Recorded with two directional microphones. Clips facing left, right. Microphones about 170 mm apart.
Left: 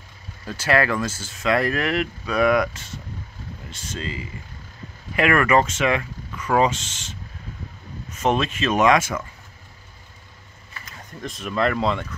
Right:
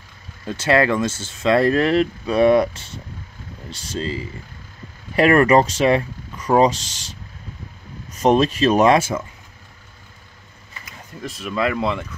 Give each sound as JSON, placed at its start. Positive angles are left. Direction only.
{"t": 0.5, "sound": "speech", "side_deg": -25}
{"t": 10.9, "sound": "speech", "side_deg": -5}